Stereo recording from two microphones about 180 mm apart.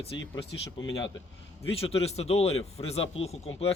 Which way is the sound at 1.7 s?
35° left (ahead or behind).